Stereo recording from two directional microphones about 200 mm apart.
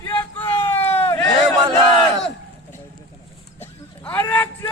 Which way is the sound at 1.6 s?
25° right (ahead or behind).